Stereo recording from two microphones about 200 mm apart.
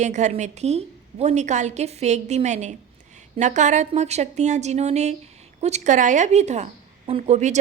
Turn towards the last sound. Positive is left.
turn(degrees=-35)  # may be behind; listen again after turning